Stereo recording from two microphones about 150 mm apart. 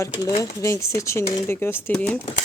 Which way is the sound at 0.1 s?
25° left (ahead or behind).